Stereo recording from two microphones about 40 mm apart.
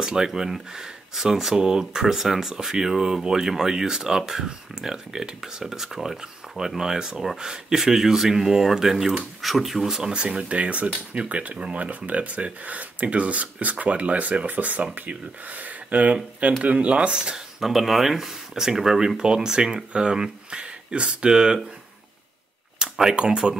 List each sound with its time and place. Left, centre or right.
0.0 s speech: centre
9.8 s speech: centre
10.2 s speech: right
15.9 s speech: right
17.6 s speech: centre
22.8 s a sound: right
23.4 s speech: centre